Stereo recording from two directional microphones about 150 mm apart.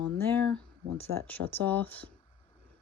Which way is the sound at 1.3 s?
10° left (ahead or behind).